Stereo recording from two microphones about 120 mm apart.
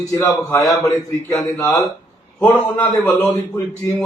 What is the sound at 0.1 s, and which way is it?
A man's voice, 30° left (ahead or behind).